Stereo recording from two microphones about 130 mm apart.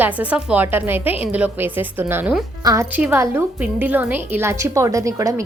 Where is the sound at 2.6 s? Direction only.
25° right (ahead or behind).